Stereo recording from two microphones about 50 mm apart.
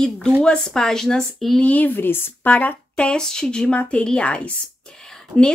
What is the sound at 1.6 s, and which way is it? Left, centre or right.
Speech, left.